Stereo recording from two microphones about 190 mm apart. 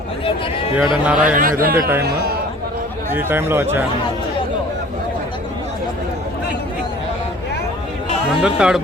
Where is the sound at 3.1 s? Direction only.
10° right (ahead or behind).